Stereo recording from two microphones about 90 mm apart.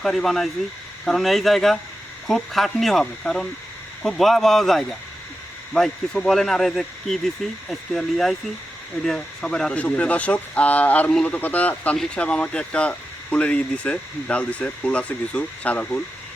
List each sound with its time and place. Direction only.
0.0 s speech: 5° left (ahead or behind)